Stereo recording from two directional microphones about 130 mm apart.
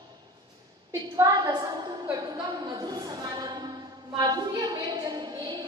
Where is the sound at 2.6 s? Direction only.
30° right (ahead or behind).